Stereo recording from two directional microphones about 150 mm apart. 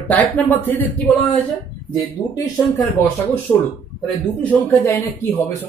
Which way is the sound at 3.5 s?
15° left (ahead or behind).